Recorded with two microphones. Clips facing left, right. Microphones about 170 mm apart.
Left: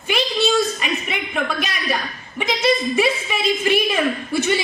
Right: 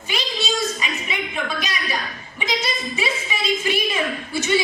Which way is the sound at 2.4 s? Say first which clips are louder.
Left 7 dB; 55° left (ahead or behind).